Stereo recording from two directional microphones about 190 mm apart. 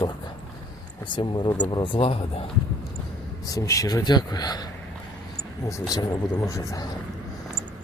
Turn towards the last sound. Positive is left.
turn(degrees=15)  # may be behind; listen again after turning